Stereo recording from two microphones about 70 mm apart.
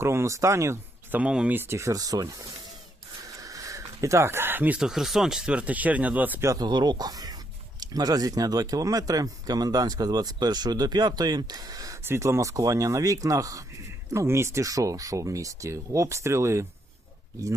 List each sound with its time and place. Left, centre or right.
0.0 s speech: right
1.3 s speech: centre
1.5 s speech: right
3.2 s a sound: right
4.8 s speech: centre; by 6.4 s right
6.6 s speech: right
12.0 s speech: right
14.1 s speech: right